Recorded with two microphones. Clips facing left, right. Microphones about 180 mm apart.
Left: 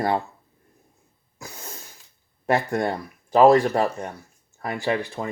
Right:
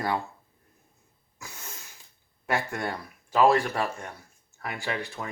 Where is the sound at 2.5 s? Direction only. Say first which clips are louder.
Left 6 dB; 35° left (ahead or behind).